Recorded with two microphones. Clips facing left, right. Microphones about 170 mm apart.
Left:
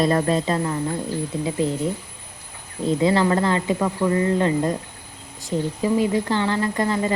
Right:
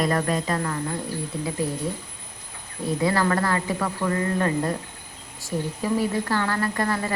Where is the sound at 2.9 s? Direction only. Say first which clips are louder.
Left 4 dB; 20° left (ahead or behind).